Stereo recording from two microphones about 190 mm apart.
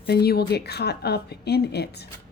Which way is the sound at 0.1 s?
55° left (ahead or behind).